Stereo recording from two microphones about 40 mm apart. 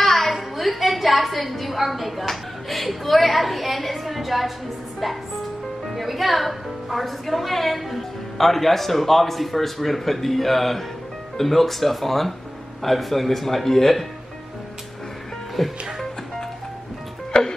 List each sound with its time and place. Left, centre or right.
0.0 s a woman's voice: centre
5.9 s a woman's voice: centre
15.6 s a woman's voice: centre
17.3 s music: centre